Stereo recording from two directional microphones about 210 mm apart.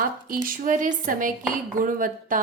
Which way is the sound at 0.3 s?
40° right (ahead or behind).